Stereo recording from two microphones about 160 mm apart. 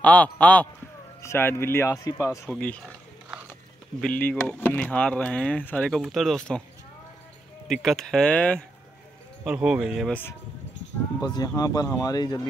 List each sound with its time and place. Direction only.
0.0 s speech: 10° left (ahead or behind)
4.0 s speech: 10° left (ahead or behind)
7.6 s speech: centre (ahead or behind)
9.4 s speech: 5° right (ahead or behind)
11.2 s speech: 25° left (ahead or behind)